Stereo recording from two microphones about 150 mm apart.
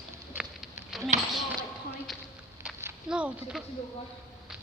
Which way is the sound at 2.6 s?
15° right (ahead or behind).